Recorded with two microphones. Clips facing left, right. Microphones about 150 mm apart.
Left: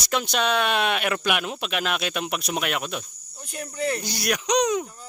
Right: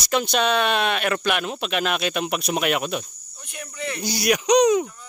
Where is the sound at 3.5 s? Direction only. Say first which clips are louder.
Left 4 dB; 40° left (ahead or behind).